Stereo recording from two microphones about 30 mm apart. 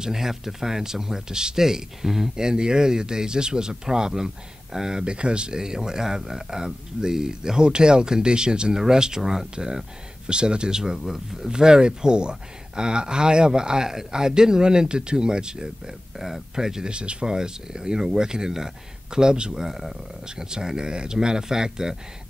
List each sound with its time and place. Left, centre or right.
0.0 s speech: centre
1.3 s speech: right
2.4 s speech: right
5.0 s speech: right
5.6 s speech: right
10.8 s speech: centre
11.5 s speech: right
16.2 s speech: centre
16.5 s speech: centre
16.8 s speech: right
19.5 s speech: centre